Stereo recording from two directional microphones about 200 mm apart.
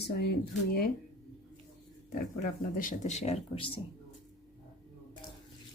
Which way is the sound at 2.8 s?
40° left (ahead or behind).